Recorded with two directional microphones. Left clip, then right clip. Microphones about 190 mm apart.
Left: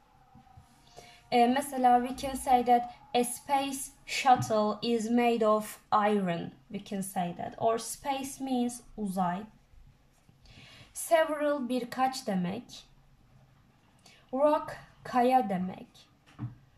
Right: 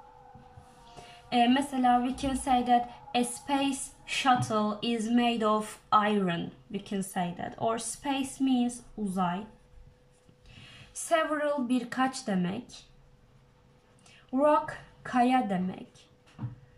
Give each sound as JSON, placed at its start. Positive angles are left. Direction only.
{"t": 1.3, "sound": "speech", "side_deg": 25}
{"t": 10.6, "sound": "a woman's voice", "side_deg": 20}
{"t": 14.3, "sound": "speech", "side_deg": 20}